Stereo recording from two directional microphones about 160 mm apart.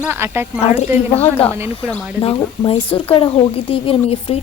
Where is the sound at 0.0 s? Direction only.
15° right (ahead or behind).